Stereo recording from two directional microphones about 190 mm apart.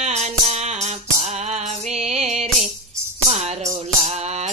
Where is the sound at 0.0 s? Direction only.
35° right (ahead or behind).